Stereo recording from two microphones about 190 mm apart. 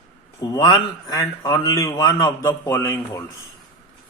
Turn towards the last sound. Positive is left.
turn(degrees=15)  # may be behind; listen again after turning